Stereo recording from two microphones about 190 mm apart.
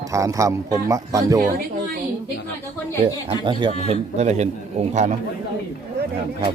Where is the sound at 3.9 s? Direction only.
35° right (ahead or behind).